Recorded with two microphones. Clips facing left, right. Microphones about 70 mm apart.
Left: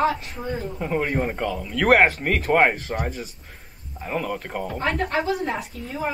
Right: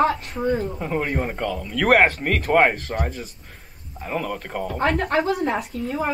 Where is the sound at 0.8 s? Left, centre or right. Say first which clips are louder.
Left 1 dB; centre.